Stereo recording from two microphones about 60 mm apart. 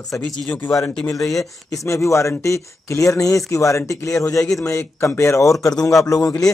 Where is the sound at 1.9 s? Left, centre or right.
Left.